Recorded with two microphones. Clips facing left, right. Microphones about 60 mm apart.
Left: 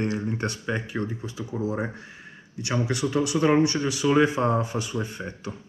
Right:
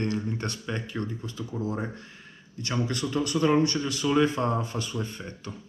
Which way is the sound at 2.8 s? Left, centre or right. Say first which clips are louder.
Left 3 dB; centre.